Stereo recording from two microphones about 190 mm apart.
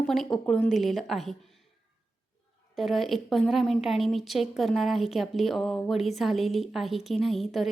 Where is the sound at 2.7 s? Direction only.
Centre (ahead or behind).